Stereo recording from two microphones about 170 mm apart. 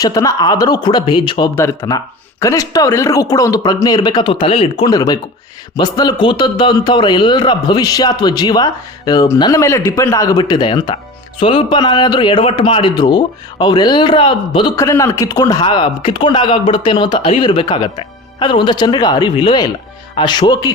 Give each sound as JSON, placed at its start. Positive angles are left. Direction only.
{"t": 0.0, "sound": "a man's voice", "side_deg": 20}
{"t": 1.5, "sound": "a man's voice", "side_deg": 15}
{"t": 4.9, "sound": "a man's voice", "side_deg": 20}
{"t": 14.8, "sound": "a man's voice", "side_deg": 20}